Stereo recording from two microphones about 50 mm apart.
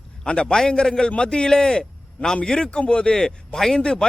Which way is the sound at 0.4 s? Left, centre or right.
Centre.